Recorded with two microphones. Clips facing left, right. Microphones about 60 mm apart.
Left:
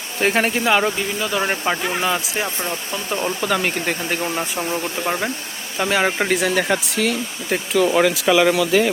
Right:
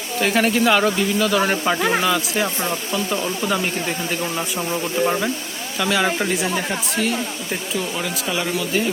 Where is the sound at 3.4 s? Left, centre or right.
Left.